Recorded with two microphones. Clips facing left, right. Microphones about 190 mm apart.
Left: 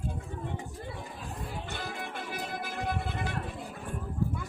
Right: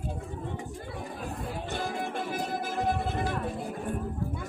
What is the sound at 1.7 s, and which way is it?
Music, 45° right (ahead or behind).